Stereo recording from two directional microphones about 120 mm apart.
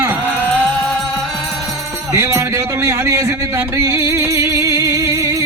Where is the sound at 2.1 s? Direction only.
25° right (ahead or behind).